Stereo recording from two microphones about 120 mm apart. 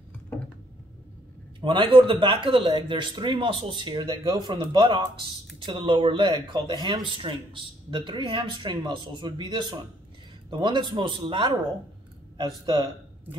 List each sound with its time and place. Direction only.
1.6 s speech: 45° right (ahead or behind)